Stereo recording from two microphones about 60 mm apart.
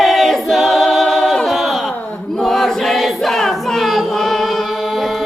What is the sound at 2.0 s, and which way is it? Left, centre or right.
Chant, left.